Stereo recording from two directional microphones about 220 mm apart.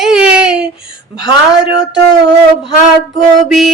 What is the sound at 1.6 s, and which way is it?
Speech, 50° right (ahead or behind).